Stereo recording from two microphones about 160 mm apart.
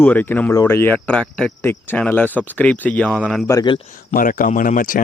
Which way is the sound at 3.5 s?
20° left (ahead or behind).